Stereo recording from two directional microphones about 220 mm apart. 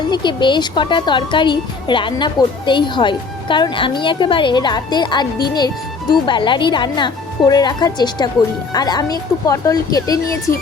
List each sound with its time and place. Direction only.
0.1 s a woman's voice: 20° left (ahead or behind)
10.5 s speech: 40° left (ahead or behind)